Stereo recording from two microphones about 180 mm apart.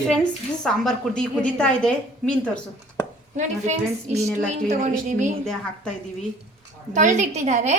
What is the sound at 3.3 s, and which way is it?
A woman's voice, 40° right (ahead or behind).